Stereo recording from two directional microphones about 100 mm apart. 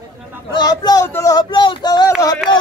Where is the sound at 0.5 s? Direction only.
45° left (ahead or behind).